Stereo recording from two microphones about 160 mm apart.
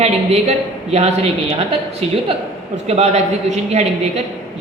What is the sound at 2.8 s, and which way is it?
A woman's voice, 45° right (ahead or behind).